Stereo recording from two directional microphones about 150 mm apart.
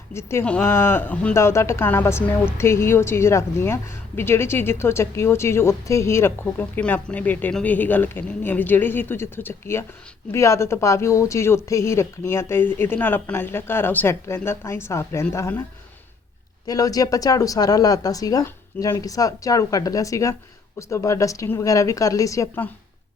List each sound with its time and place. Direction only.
0.1 s a woman's voice: 15° left (ahead or behind)
16.6 s speech: 25° left (ahead or behind)